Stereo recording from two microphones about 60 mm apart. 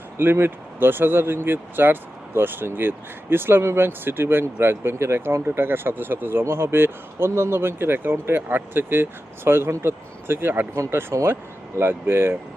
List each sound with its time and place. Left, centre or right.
0.2 s speech: right
10.8 s speech: right